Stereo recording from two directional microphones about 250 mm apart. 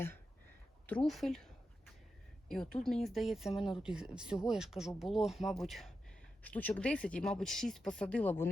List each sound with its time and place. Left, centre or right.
0.9 s speech: centre
2.5 s speech: centre